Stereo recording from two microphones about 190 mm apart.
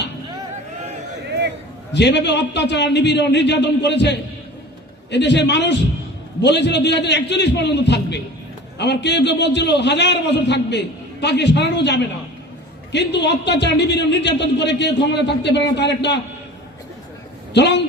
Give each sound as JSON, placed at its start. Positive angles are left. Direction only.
{"t": 1.9, "sound": "a man's voice", "side_deg": 65}
{"t": 17.5, "sound": "a man's voice", "side_deg": 65}